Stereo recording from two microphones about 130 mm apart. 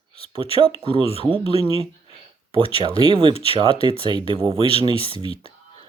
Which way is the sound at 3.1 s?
40° right (ahead or behind).